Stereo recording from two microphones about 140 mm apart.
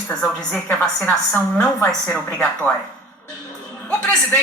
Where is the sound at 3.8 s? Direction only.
10° left (ahead or behind).